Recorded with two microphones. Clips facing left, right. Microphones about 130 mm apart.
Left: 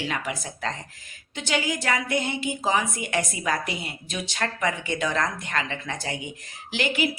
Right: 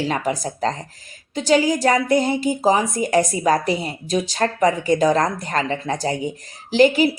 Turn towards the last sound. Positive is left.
turn(degrees=-35)  # may be behind; listen again after turning